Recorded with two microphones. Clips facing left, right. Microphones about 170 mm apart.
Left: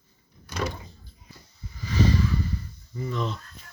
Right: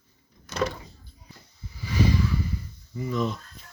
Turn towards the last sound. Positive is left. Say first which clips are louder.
# right 3 dB
turn(degrees=-10)  # may be behind; listen again after turning